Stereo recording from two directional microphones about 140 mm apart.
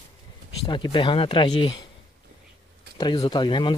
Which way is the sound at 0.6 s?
35° left (ahead or behind).